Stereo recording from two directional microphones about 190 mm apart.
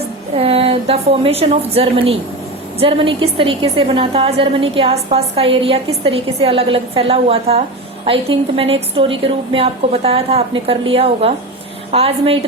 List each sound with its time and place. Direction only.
0.3 s a woman's voice: 30° right (ahead or behind)